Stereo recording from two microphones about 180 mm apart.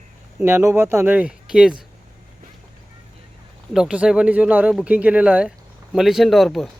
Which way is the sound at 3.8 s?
5° right (ahead or behind).